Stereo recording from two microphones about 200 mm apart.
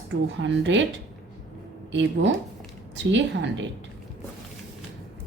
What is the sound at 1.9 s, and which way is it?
Speech, 65° right (ahead or behind).